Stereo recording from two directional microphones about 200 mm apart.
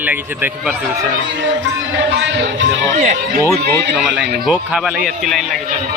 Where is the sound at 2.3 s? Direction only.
65° right (ahead or behind).